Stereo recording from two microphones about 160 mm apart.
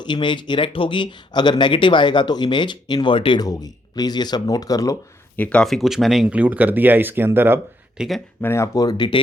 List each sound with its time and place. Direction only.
0.0 s speech: 30° left (ahead or behind)
5.4 s speech: 5° left (ahead or behind); by 8.0 s 15° right (ahead or behind)
8.4 s speech: 15° left (ahead or behind)